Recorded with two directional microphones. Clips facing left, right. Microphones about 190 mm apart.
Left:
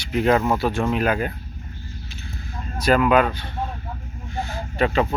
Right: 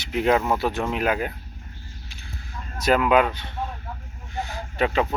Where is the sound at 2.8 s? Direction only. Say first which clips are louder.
Left 2 dB; 20° right (ahead or behind).